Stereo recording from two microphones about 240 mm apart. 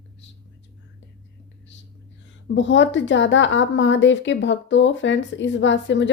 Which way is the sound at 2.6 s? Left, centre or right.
Left.